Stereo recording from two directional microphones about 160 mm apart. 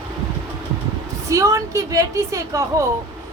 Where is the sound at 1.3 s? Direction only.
20° right (ahead or behind).